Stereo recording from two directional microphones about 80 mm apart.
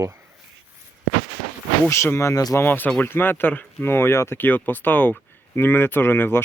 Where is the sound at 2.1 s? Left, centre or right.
Left.